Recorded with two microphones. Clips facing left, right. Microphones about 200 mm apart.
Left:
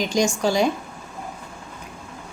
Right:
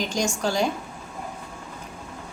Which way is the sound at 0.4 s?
10° left (ahead or behind).